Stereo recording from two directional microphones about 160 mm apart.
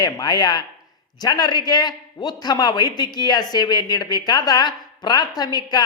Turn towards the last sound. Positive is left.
turn(degrees=25)  # may be behind; listen again after turning